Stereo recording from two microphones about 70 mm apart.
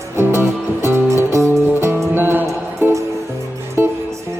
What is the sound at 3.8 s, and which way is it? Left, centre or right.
Music, right.